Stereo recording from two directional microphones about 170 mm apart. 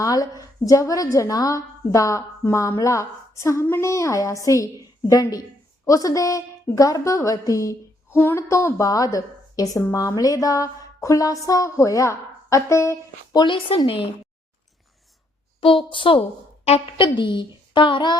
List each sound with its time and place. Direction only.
0.0 s a woman's voice: 20° left (ahead or behind)
15.6 s a woman's voice: 30° left (ahead or behind)